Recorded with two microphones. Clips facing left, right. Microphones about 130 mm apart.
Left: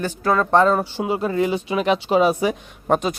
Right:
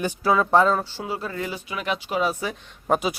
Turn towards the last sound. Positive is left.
turn(degrees=-5)  # may be behind; listen again after turning